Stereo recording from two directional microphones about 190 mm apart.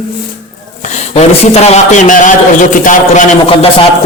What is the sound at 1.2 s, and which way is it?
A man's voice, 35° left (ahead or behind).